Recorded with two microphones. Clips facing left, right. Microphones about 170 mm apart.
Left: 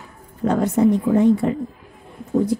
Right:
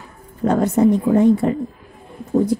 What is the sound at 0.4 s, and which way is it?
Speech, 45° right (ahead or behind).